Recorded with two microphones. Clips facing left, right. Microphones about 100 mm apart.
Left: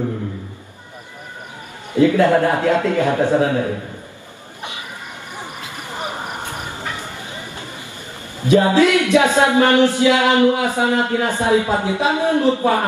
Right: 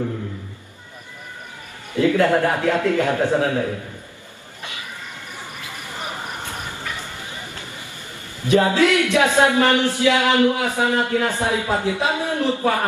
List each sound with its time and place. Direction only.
2.0 s speech: 20° left (ahead or behind)
5.4 s a sound: 20° left (ahead or behind)
8.4 s speech: 20° left (ahead or behind)